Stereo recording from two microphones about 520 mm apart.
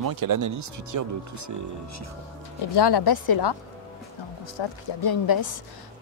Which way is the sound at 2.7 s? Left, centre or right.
Left.